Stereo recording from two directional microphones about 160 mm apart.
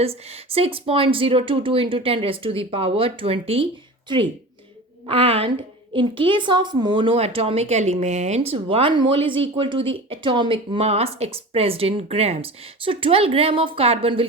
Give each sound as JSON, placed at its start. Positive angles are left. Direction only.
{"t": 0.0, "sound": "a woman's voice", "side_deg": -40}
{"t": 5.0, "sound": "a woman's voice", "side_deg": -35}